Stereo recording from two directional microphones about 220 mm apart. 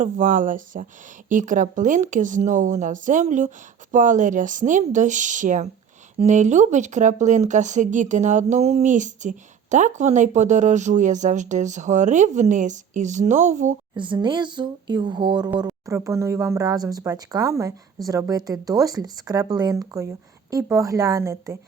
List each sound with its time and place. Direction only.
0.0 s speech: 35° right (ahead or behind)
13.9 s speech: 20° right (ahead or behind)